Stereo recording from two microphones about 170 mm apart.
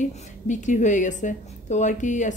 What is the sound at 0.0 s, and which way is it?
A woman's voice, 45° left (ahead or behind).